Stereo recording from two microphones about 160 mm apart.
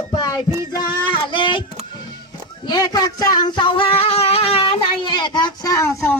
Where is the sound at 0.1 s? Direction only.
25° left (ahead or behind).